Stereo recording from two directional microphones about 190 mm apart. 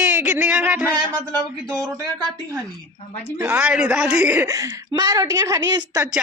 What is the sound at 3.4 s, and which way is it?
A woman's voice, 5° right (ahead or behind).